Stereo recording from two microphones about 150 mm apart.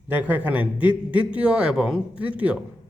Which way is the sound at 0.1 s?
10° right (ahead or behind).